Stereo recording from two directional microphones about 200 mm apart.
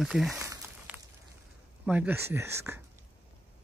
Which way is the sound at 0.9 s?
5° right (ahead or behind).